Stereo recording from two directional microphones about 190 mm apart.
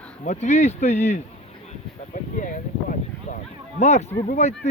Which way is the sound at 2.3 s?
40° left (ahead or behind).